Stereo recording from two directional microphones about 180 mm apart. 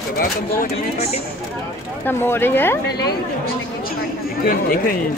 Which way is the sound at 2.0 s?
10° left (ahead or behind).